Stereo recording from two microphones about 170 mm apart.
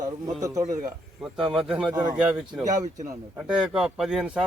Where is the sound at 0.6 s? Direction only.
50° right (ahead or behind).